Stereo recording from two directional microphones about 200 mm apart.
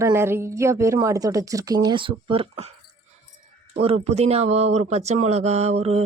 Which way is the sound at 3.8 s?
30° right (ahead or behind).